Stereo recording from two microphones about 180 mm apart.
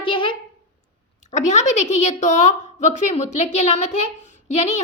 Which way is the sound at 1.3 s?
40° left (ahead or behind).